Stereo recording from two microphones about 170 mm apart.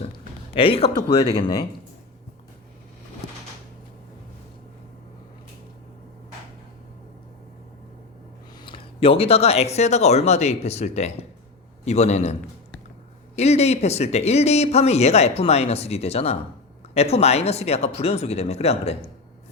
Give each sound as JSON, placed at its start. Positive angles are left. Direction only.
{"t": 0.5, "sound": "speech", "side_deg": 35}
{"t": 8.6, "sound": "speech", "side_deg": 30}